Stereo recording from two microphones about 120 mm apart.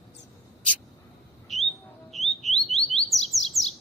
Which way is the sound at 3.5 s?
25° left (ahead or behind).